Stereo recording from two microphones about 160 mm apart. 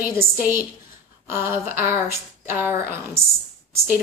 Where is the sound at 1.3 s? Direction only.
15° right (ahead or behind).